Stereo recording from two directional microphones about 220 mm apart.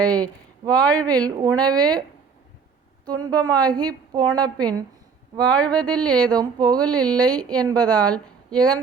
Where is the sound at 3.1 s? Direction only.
15° right (ahead or behind).